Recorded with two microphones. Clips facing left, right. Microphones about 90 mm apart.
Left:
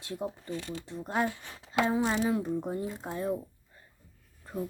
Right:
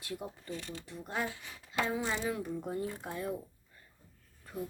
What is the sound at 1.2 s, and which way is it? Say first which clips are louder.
Speech: left 6 dB; 60° left (ahead or behind).